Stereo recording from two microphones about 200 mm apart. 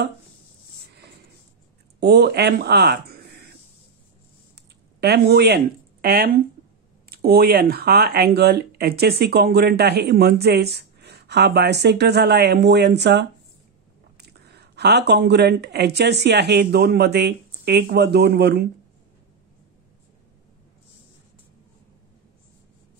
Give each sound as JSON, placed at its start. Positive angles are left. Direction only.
{"t": 2.0, "sound": "speech", "side_deg": -55}
{"t": 5.0, "sound": "speech", "side_deg": -55}